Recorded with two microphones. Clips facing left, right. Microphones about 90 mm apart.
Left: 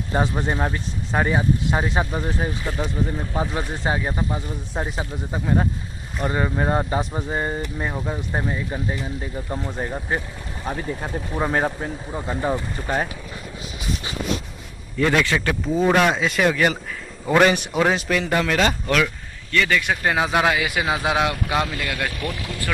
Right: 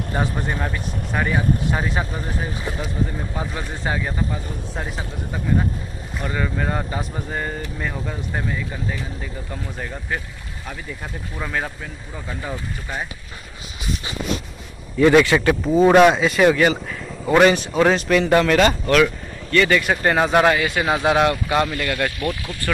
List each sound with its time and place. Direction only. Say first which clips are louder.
0.1 s speech: left 3 dB; 25° left (ahead or behind)
3.8 s speech: right 1 dB; 25° left (ahead or behind); by 13.1 s 40° left (ahead or behind)
15.0 s speech: right 6 dB; 10° right (ahead or behind)
17.5 s speech: right 3 dB; 10° left (ahead or behind)